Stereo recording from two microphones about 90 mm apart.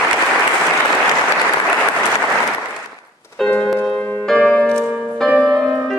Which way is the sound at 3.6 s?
5° left (ahead or behind).